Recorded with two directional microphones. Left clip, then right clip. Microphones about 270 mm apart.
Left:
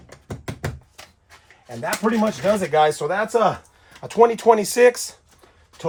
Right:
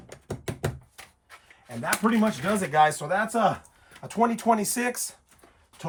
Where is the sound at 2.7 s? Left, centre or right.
Centre.